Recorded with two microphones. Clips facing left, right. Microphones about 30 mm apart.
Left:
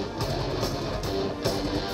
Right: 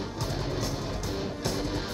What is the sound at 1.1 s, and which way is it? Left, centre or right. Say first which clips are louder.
Music: left 5 dB; left.